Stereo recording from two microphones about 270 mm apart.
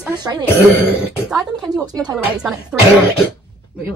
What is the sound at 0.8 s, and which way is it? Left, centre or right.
Speech, centre.